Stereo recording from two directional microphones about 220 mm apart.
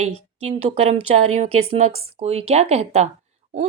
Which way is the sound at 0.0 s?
30° right (ahead or behind).